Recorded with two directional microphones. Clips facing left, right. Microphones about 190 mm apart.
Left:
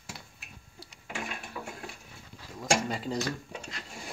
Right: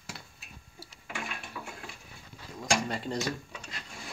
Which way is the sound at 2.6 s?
5° left (ahead or behind).